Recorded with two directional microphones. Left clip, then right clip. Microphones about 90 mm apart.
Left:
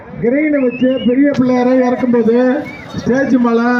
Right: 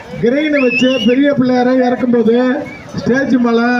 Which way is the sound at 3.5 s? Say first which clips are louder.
Right 1 dB; 20° right (ahead or behind).